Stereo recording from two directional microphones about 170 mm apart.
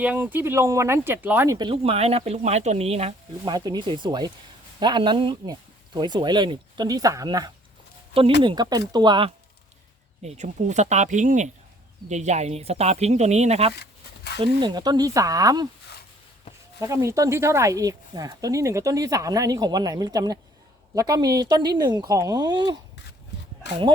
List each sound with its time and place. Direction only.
0.0 s speech: 10° right (ahead or behind)
1.5 s speech: 30° right (ahead or behind)
10.2 s speech: 45° right (ahead or behind); by 15.6 s 20° right (ahead or behind)
16.8 s speech: 15° right (ahead or behind)